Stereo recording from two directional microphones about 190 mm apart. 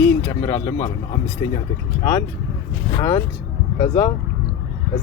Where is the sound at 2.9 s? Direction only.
25° left (ahead or behind).